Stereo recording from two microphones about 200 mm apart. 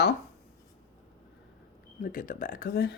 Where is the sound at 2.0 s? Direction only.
45° left (ahead or behind).